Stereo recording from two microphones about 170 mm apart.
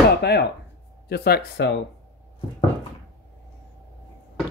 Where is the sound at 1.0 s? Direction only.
70° left (ahead or behind).